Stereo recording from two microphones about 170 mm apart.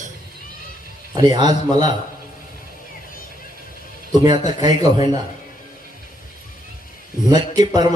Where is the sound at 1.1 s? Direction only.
25° right (ahead or behind).